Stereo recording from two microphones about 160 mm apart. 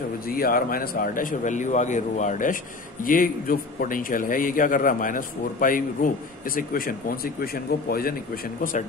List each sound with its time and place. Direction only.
0.3 s a man's voice: 65° left (ahead or behind)